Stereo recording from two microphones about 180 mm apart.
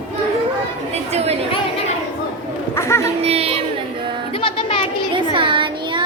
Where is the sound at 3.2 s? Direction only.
35° right (ahead or behind).